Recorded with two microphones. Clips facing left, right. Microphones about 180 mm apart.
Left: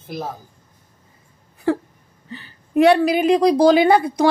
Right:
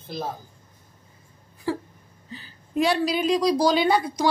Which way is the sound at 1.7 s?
60° left (ahead or behind).